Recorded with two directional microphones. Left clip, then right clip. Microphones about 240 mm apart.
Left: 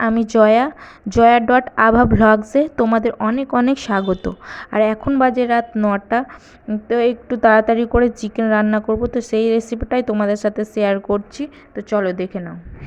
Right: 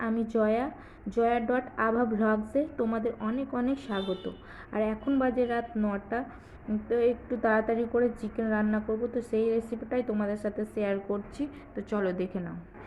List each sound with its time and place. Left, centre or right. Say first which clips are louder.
0.0 s a woman's voice: left 15 dB; left